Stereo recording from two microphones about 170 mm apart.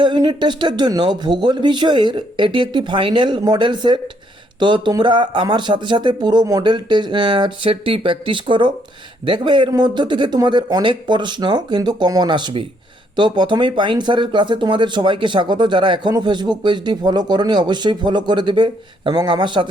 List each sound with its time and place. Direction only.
0.0 s speech: 25° right (ahead or behind)